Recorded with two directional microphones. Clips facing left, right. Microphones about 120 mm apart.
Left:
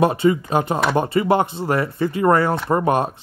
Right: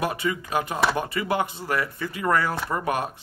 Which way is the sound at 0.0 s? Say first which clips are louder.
Left 10 dB; 30° left (ahead or behind).